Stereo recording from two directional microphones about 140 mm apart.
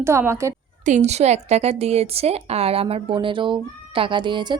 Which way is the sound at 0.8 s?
55° right (ahead or behind).